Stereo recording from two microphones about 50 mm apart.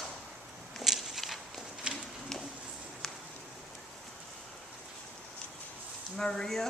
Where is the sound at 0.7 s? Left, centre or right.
Centre.